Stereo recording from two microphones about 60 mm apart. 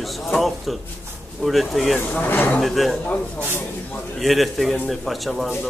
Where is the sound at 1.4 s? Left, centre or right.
Centre.